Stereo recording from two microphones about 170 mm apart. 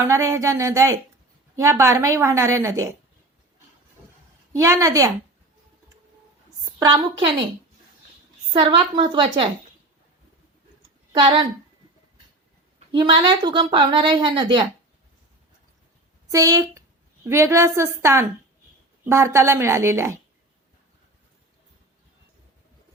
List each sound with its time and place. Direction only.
0.0 s a woman's voice: 15° right (ahead or behind)
4.5 s a woman's voice: 20° right (ahead or behind)
6.7 s a woman's voice: 25° right (ahead or behind)
8.5 s a woman's voice: 30° right (ahead or behind)
11.1 s speech: 30° right (ahead or behind)
12.9 s a woman's voice: 25° right (ahead or behind)
16.3 s a woman's voice: 20° right (ahead or behind)